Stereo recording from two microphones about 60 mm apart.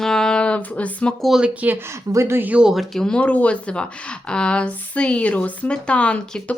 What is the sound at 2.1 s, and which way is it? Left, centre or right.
Speech, right.